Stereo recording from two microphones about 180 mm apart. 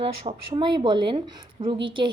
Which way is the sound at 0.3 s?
25° right (ahead or behind).